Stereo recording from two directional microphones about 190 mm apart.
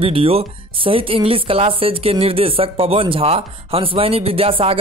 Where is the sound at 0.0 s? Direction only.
30° right (ahead or behind).